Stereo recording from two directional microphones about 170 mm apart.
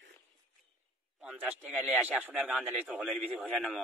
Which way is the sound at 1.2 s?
5° right (ahead or behind).